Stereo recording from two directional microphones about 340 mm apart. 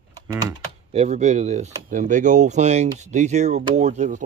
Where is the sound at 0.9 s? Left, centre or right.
Centre.